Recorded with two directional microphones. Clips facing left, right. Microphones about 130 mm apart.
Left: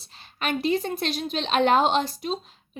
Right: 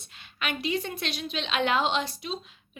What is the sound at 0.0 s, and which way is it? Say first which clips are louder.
A woman's voice: left 4 dB; 35° left (ahead or behind).